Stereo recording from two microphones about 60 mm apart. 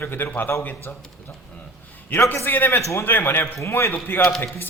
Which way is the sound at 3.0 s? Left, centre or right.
Left.